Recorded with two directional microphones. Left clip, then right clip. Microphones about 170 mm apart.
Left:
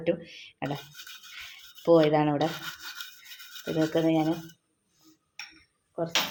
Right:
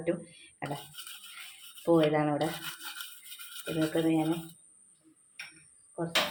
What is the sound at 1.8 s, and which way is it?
Speech, 40° left (ahead or behind).